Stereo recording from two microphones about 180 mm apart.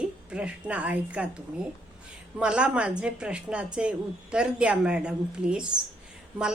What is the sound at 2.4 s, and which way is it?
A woman's voice, 5° right (ahead or behind).